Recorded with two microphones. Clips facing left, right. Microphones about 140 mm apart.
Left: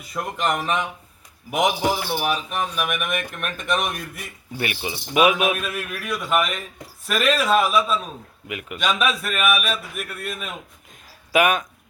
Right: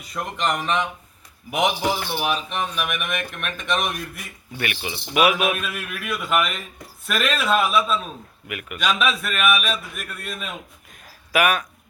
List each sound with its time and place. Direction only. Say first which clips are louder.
0.1 s a man's voice: left 1 dB; 5° left (ahead or behind)
4.5 s a man's voice: left 2 dB; 30° left (ahead or behind)
5.5 s a man's voice: left 2 dB; centre (ahead or behind)
8.4 s a man's voice: left 1 dB; 25° left (ahead or behind)
8.8 s a man's voice: even; centre (ahead or behind)
11.3 s a man's voice: left 2 dB; 20° left (ahead or behind)